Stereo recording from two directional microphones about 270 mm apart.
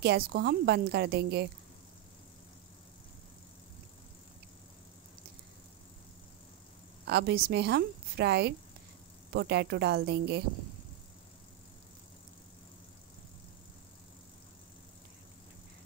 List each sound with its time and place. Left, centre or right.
0.0 s a woman's voice: right
7.1 s a woman's voice: right